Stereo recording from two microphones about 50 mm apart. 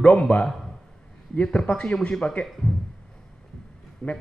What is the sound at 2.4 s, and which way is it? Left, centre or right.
Speech, centre.